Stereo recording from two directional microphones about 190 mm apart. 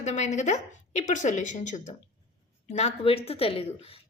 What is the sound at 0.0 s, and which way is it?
A woman's voice, 40° left (ahead or behind).